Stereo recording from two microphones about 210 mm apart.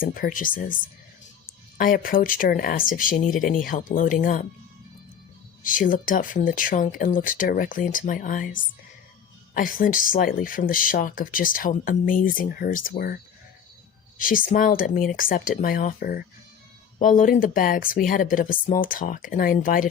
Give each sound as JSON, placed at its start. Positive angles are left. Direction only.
{"t": 0.0, "sound": "speech", "side_deg": 40}
{"t": 1.8, "sound": "speech", "side_deg": 40}
{"t": 5.6, "sound": "speech", "side_deg": 40}
{"t": 14.2, "sound": "speech", "side_deg": 40}